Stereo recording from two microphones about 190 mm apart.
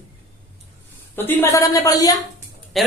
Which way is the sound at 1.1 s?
10° left (ahead or behind).